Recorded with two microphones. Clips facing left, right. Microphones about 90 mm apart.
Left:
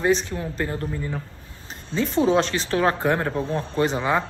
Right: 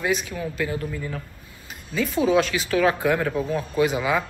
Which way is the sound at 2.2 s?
30° left (ahead or behind).